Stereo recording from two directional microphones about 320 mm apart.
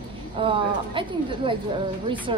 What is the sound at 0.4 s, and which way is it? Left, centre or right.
A woman's voice, centre.